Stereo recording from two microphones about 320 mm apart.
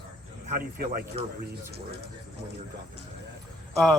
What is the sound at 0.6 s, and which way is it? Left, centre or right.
Speech, right.